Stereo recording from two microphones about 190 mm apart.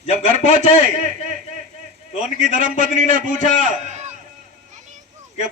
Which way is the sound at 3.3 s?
40° right (ahead or behind).